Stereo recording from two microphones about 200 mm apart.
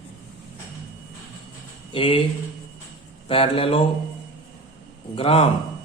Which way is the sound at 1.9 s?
25° left (ahead or behind).